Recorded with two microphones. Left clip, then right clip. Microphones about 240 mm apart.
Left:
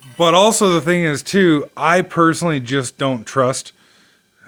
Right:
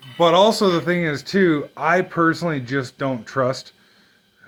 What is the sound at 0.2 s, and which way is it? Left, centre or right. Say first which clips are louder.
Speech: left 2 dB; left.